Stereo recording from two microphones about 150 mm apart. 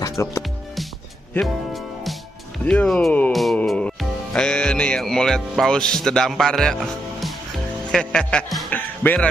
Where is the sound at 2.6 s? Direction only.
5° left (ahead or behind).